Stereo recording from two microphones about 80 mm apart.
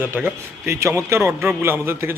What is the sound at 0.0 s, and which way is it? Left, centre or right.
Speech, right.